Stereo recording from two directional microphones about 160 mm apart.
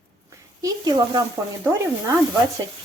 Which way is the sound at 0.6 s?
20° right (ahead or behind).